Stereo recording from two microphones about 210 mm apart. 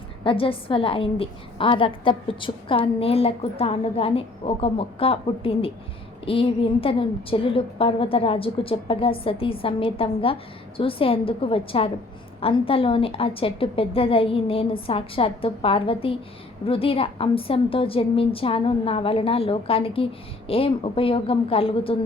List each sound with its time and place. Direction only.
0.3 s a woman's voice: 25° left (ahead or behind)